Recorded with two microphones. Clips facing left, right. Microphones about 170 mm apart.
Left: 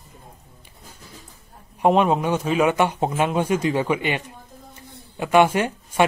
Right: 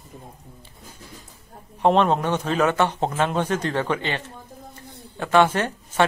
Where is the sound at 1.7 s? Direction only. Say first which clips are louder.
Left 1 dB; 10° left (ahead or behind).